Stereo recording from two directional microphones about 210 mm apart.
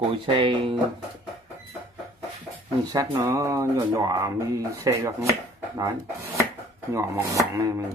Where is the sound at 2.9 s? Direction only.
15° right (ahead or behind).